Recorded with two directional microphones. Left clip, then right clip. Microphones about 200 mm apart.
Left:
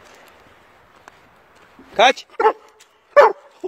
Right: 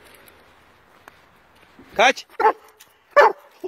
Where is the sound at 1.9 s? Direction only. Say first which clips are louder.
Left 3 dB; 10° left (ahead or behind).